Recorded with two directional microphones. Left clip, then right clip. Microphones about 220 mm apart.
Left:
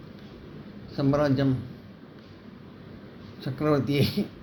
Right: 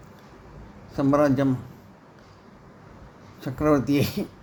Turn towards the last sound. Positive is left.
turn(degrees=-45)  # may be behind; listen again after turning